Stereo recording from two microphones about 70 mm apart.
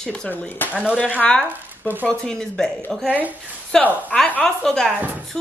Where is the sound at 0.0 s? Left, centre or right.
Centre.